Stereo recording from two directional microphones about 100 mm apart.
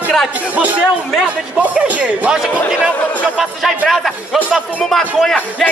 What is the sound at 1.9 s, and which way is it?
Speech, 15° right (ahead or behind).